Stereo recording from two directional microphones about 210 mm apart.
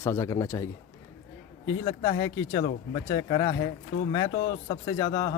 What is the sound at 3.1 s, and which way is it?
Speech, 20° left (ahead or behind).